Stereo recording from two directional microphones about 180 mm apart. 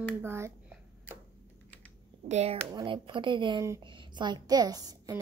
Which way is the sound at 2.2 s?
35° right (ahead or behind).